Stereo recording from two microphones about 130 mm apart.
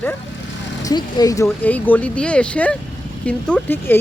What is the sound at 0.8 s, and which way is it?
Speech, 30° left (ahead or behind).